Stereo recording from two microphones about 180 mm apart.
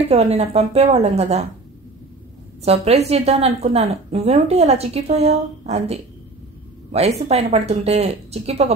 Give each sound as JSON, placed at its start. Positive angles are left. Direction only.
{"t": 0.0, "sound": "a woman's voice", "side_deg": -35}
{"t": 2.6, "sound": "a woman's voice", "side_deg": -35}